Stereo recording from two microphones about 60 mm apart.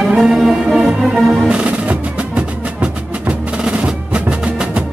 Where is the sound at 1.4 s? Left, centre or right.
Centre.